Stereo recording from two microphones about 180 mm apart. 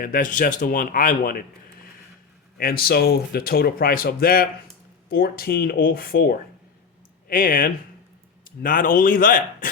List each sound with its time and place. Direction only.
0.0 s speech: 50° left (ahead or behind)
2.6 s speech: 55° left (ahead or behind)